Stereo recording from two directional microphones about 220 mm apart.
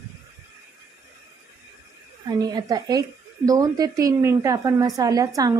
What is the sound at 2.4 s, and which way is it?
A woman's voice, 20° right (ahead or behind).